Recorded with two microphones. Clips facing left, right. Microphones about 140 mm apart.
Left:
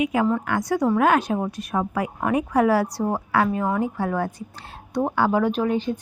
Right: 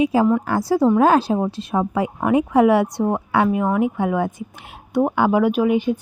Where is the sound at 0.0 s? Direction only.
30° right (ahead or behind).